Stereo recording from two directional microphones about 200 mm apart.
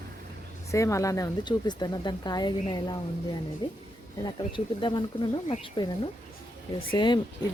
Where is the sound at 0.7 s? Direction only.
15° left (ahead or behind).